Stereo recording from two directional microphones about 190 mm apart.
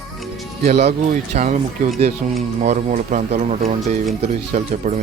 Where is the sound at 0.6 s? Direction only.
35° right (ahead or behind).